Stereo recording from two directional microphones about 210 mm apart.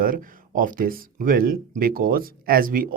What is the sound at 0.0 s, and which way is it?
Speech, 40° right (ahead or behind).